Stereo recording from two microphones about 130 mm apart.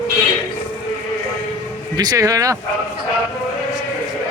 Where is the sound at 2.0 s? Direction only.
30° right (ahead or behind).